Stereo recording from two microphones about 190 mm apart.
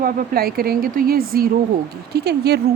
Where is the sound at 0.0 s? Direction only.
50° right (ahead or behind).